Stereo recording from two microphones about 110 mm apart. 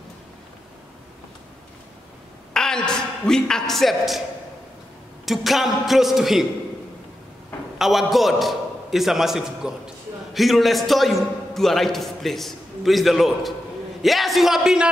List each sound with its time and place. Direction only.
2.5 s a sound: 5° left (ahead or behind)
5.2 s a man's voice: centre (ahead or behind)
7.8 s a man's voice: centre (ahead or behind)